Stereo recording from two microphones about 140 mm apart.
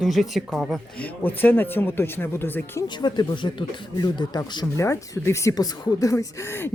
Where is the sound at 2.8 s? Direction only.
30° left (ahead or behind).